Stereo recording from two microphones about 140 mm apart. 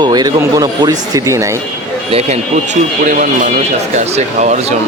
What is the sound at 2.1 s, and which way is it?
Speech, 45° right (ahead or behind).